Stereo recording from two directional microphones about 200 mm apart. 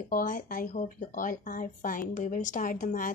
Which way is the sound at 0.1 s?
45° left (ahead or behind).